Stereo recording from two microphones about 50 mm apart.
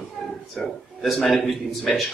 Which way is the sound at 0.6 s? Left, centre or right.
Left.